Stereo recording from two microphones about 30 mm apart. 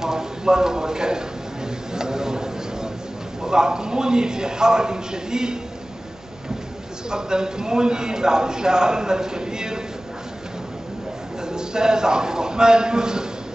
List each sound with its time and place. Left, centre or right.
0.0 s a sound: centre
3.4 s a man's voice: right
7.1 s a man's voice: right
11.4 s a man's voice: right